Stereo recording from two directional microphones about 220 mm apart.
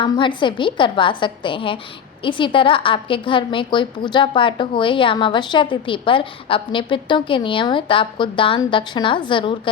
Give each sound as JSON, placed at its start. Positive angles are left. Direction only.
{"t": 0.0, "sound": "a woman's voice", "side_deg": 20}